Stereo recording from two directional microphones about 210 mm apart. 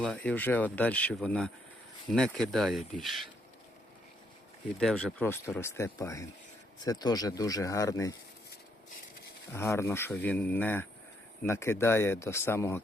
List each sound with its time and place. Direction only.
0.3 s speech: 10° left (ahead or behind)
4.8 s speech: centre (ahead or behind)
9.5 s speech: 10° left (ahead or behind)